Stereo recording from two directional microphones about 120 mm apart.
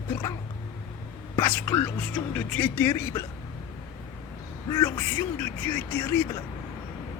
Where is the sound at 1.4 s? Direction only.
20° left (ahead or behind).